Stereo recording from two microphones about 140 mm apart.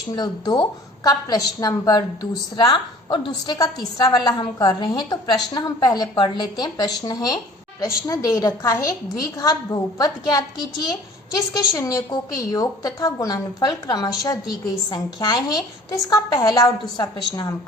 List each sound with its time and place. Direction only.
0.2 s a woman's voice: 30° left (ahead or behind)
11.5 s a woman's voice: 25° left (ahead or behind)